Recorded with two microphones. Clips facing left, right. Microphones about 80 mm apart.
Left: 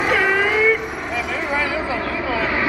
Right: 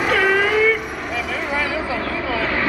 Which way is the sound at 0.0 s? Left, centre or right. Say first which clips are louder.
Right 1 dB; centre.